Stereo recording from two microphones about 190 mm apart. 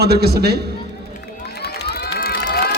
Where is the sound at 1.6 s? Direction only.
55° left (ahead or behind).